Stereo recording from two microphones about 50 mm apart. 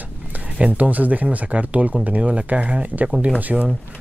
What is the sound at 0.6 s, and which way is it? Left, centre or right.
Speech, right.